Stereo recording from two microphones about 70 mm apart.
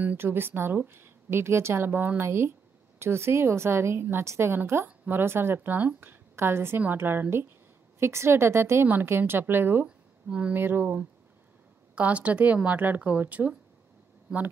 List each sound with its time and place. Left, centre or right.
0.2 s a woman's voice: right
9.8 s a sound: centre
10.5 s a woman's voice: right
11.9 s speech: centre